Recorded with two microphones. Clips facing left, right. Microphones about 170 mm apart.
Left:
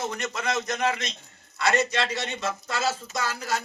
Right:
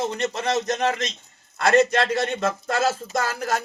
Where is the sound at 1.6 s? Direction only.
50° right (ahead or behind).